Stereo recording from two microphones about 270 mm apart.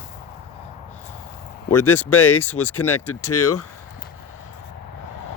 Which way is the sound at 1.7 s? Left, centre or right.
Left.